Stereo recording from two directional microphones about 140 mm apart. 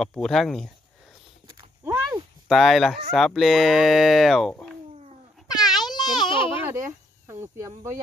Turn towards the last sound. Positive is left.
turn(degrees=-20)  # may be behind; listen again after turning